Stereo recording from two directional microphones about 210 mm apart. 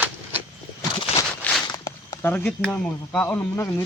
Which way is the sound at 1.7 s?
15° left (ahead or behind).